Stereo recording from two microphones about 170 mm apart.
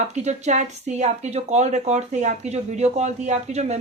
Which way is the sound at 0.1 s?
40° right (ahead or behind).